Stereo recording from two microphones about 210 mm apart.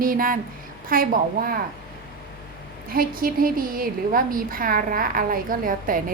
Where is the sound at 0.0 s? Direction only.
40° right (ahead or behind).